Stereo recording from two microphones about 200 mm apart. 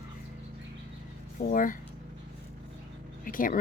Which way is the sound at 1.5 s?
40° left (ahead or behind).